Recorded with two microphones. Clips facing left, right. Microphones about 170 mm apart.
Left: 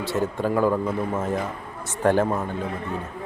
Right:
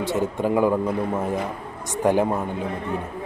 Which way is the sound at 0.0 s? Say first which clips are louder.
Right 2 dB; 15° right (ahead or behind).